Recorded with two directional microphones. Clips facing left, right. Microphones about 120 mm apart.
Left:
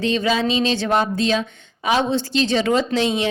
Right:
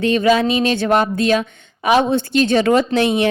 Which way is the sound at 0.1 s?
55° right (ahead or behind).